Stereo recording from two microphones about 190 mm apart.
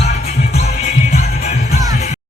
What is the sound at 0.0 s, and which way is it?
Music, 35° left (ahead or behind).